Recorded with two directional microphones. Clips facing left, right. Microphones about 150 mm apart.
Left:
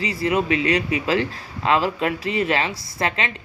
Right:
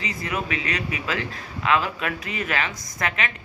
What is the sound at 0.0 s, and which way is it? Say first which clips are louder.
A man's voice: left 7 dB; 30° left (ahead or behind).